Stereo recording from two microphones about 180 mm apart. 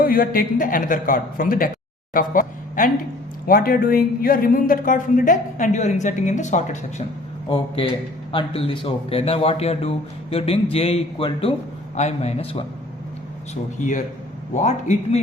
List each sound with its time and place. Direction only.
0.0 s speech: 55° left (ahead or behind)
7.5 s a man's voice: 30° left (ahead or behind)
13.7 s speech: 45° left (ahead or behind)